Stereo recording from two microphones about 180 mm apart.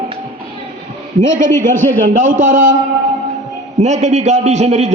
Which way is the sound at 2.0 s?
50° right (ahead or behind).